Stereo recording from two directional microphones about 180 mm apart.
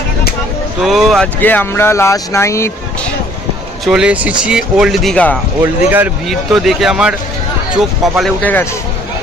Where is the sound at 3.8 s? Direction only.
5° right (ahead or behind).